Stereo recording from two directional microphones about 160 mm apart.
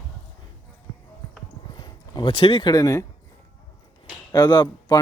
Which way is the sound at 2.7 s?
20° left (ahead or behind).